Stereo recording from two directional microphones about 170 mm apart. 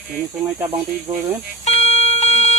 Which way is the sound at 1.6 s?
35° left (ahead or behind).